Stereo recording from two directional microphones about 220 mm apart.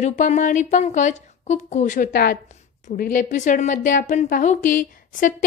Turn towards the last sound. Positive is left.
turn(degrees=35)  # may be behind; listen again after turning